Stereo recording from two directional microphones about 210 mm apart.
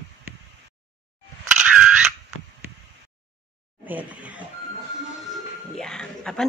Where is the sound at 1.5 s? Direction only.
5° right (ahead or behind).